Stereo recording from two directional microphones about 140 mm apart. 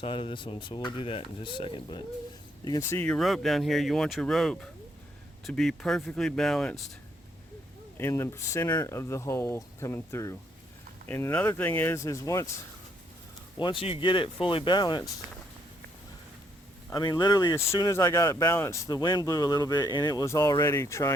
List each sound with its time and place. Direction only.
0.0 s speech: 35° left (ahead or behind)
2.6 s speech: 25° left (ahead or behind)
3.0 s speech: 5° left (ahead or behind)
7.9 s speech: 20° left (ahead or behind)
13.6 s speech: 35° left (ahead or behind)
16.9 s speech: 30° left (ahead or behind)